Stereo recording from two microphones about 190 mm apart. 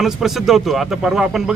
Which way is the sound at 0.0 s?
Centre (ahead or behind).